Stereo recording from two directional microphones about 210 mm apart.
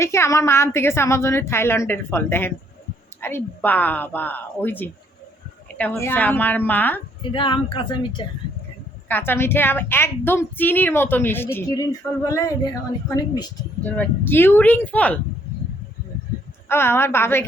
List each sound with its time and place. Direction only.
0.0 s a woman's voice: 15° left (ahead or behind)
7.2 s speech: 25° left (ahead or behind)
9.0 s a woman's voice: 10° left (ahead or behind)
13.8 s a woman's voice: 5° left (ahead or behind)
16.6 s a woman's voice: 10° left (ahead or behind)